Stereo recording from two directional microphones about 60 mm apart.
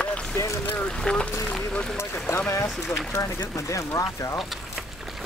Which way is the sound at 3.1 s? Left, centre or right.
Left.